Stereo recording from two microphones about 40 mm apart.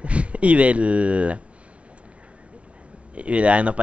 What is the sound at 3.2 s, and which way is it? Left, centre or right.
Speech, right.